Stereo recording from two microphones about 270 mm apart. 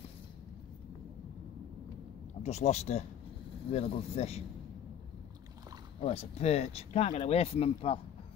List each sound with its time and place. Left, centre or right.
2.4 s speech: left
5.9 s speech: left